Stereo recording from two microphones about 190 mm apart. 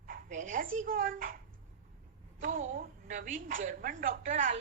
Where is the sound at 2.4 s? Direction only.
45° right (ahead or behind).